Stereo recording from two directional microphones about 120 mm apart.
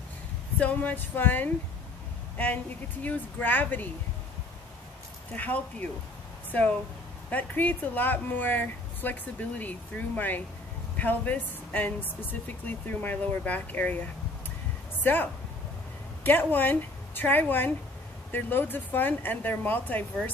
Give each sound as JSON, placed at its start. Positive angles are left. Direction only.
{"t": 0.6, "sound": "speech", "side_deg": 15}
{"t": 5.3, "sound": "speech", "side_deg": 15}
{"t": 16.3, "sound": "speech", "side_deg": 15}